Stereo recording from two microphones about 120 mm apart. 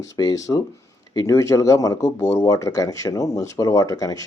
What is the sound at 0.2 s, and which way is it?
Speech, 30° left (ahead or behind).